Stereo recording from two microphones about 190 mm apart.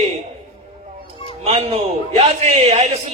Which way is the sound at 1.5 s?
30° right (ahead or behind).